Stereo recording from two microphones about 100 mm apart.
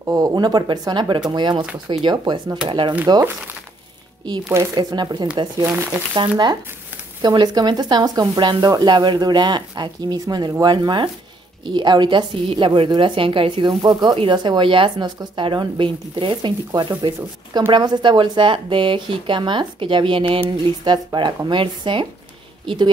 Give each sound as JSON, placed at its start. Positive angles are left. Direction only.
{"t": 0.0, "sound": "speech", "side_deg": -35}
{"t": 4.7, "sound": "speech", "side_deg": -45}
{"t": 5.6, "sound": "speech", "side_deg": -25}
{"t": 6.1, "sound": "a woman's voice", "side_deg": -50}